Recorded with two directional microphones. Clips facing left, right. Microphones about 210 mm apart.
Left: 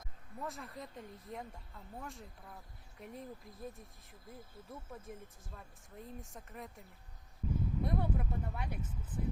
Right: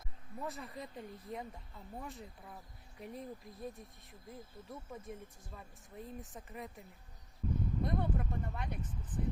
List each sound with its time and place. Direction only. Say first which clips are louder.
0.4 s speech: right 1 dB; centre (ahead or behind)